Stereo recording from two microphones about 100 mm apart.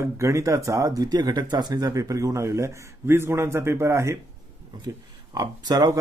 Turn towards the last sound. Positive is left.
turn(degrees=-40)  # may be behind; listen again after turning